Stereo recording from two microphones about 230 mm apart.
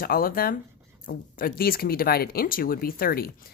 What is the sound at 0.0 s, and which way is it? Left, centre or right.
Speech, left.